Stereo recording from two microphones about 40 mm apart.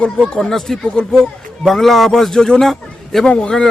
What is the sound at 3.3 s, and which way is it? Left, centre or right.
Speech, left.